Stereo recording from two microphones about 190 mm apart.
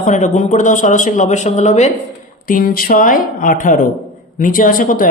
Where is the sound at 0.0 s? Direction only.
40° left (ahead or behind).